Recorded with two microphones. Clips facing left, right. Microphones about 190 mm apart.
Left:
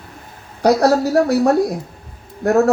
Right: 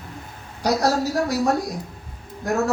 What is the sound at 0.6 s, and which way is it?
Speech, 60° left (ahead or behind).